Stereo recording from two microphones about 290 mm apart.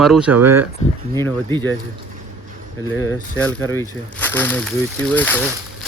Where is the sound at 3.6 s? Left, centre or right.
Centre.